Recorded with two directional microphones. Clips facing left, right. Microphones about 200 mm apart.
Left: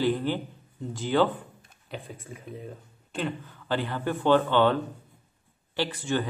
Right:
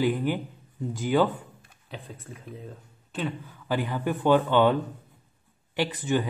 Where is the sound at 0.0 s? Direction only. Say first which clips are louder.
Right 1 dB; 15° right (ahead or behind).